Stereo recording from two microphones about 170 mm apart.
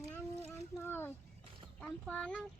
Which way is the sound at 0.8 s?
15° left (ahead or behind).